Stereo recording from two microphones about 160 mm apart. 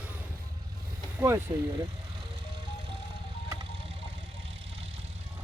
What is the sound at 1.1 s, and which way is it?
Speech, 15° right (ahead or behind).